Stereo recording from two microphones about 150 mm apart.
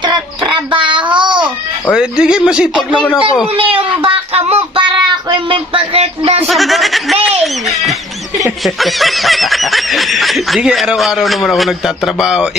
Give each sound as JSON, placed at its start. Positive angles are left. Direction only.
{"t": 0.0, "sound": "child singing", "side_deg": -30}
{"t": 1.1, "sound": "babbling", "side_deg": -30}
{"t": 1.4, "sound": "speech", "side_deg": -5}
{"t": 3.5, "sound": "child singing", "side_deg": -35}
{"t": 5.3, "sound": "speech", "side_deg": -35}
{"t": 6.4, "sound": "snicker", "side_deg": 0}
{"t": 8.5, "sound": "snicker", "side_deg": 0}